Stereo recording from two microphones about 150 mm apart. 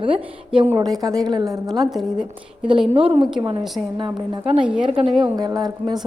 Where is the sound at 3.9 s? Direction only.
30° right (ahead or behind).